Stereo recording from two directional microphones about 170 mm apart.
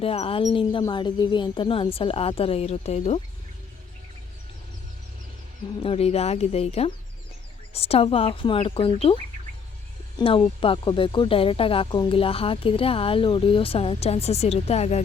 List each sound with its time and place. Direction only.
0.0 s speech: 35° left (ahead or behind)
5.8 s speech: 35° left (ahead or behind)
10.2 s speech: 30° left (ahead or behind)